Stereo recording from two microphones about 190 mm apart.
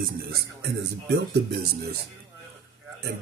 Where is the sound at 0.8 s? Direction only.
60° right (ahead or behind).